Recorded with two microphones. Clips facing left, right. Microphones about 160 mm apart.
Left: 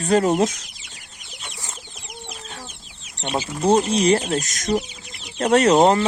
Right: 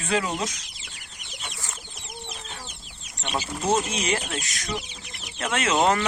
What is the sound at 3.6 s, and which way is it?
Speech, 35° left (ahead or behind).